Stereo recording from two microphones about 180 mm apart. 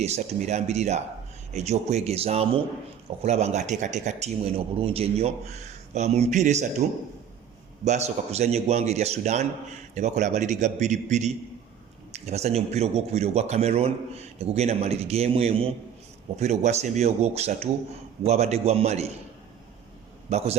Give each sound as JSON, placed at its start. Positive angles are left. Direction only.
{"t": 0.0, "sound": "speech", "side_deg": -40}
{"t": 7.9, "sound": "speech", "side_deg": -40}
{"t": 20.3, "sound": "speech", "side_deg": -35}